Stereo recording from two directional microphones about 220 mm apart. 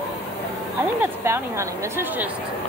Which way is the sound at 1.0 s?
10° right (ahead or behind).